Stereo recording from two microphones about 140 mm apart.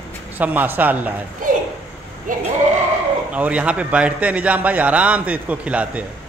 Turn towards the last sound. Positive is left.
turn(degrees=-10)  # may be behind; listen again after turning